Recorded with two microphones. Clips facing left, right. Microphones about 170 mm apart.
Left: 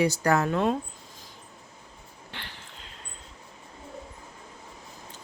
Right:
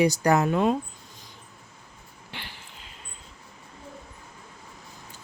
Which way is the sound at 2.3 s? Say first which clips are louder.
Right 1 dB; 10° right (ahead or behind).